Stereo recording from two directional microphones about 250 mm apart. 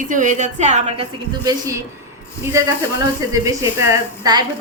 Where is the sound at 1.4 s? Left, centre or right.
Centre.